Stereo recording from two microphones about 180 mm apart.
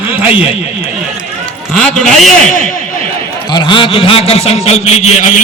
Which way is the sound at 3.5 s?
25° left (ahead or behind).